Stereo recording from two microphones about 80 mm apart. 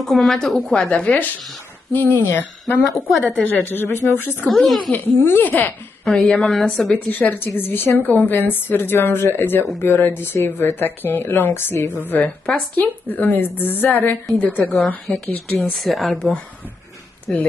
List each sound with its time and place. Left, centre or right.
0.0 s a woman's voice: centre
1.9 s a woman's voice: left
4.5 s a woman's voice: centre
4.9 s a woman's voice: left
6.0 s a woman's voice: centre
7.1 s a woman's voice: left
15.6 s a woman's voice: centre